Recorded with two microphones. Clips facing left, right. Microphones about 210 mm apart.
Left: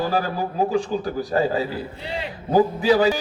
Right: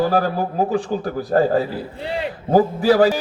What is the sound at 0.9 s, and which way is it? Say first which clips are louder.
Speech: right 3 dB; 50° right (ahead or behind).